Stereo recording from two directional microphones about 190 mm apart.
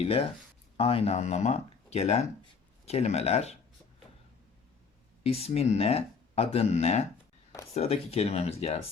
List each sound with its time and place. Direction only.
0.0 s speech: 30° left (ahead or behind)
5.2 s speech: 30° left (ahead or behind)